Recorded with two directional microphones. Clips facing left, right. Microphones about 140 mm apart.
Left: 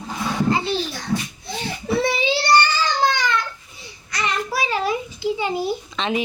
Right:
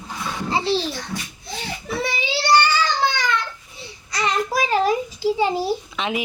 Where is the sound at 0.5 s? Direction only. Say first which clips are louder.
Right 2 dB; 30° right (ahead or behind).